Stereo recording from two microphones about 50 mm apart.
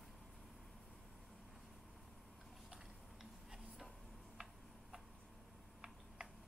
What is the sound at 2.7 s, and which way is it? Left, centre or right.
Tick-tock, centre.